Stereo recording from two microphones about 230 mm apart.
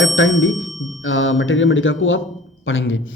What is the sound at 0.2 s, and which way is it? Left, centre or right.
Speech, left.